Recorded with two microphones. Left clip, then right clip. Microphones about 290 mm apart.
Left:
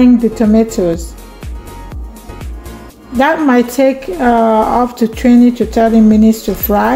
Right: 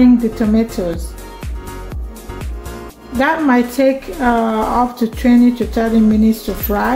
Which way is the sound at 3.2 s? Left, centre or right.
Left.